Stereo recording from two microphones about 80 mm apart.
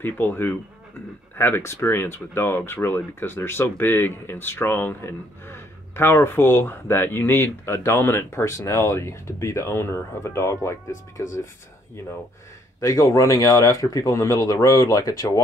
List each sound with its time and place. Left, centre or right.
0.0 s speech: left
12.8 s speech: left